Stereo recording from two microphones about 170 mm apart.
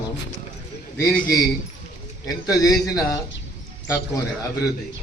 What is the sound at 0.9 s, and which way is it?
Speech, 10° left (ahead or behind).